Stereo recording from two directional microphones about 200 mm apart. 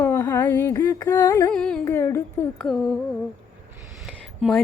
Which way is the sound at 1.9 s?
15° left (ahead or behind).